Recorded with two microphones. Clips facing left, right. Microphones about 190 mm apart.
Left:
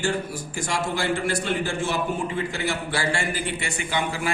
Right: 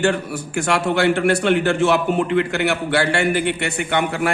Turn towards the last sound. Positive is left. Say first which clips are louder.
# right 7 dB
turn(degrees=-60)  # may be behind; listen again after turning